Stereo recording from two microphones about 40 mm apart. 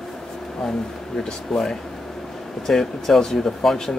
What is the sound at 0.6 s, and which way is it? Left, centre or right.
Speech, centre.